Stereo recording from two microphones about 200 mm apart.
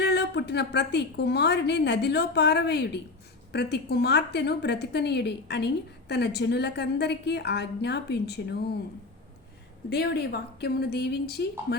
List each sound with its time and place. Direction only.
0.0 s a woman's voice: 55° left (ahead or behind)
9.9 s a woman's voice: 55° left (ahead or behind)